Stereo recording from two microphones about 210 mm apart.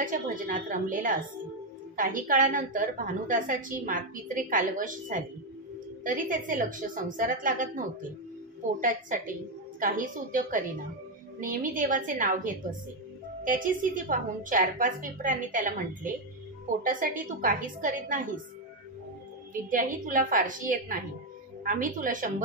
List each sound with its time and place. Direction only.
0.0 s a woman's voice: 40° right (ahead or behind)
19.7 s a woman's voice: 40° right (ahead or behind)